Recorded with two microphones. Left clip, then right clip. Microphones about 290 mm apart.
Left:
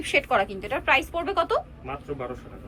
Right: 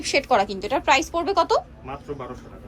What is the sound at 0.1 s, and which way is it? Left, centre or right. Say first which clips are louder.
A woman's voice: right 3 dB; centre.